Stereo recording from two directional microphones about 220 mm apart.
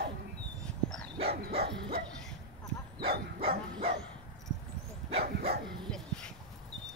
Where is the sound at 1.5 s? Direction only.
25° right (ahead or behind).